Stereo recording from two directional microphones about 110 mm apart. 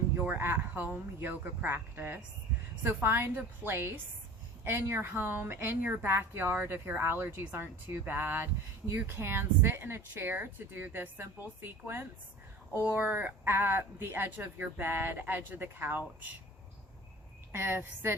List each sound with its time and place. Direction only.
0.2 s speech: 20° right (ahead or behind)
17.5 s speech: 20° right (ahead or behind)